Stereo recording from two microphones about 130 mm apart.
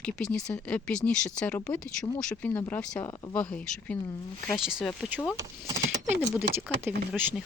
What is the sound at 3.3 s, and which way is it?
Speech, 10° left (ahead or behind).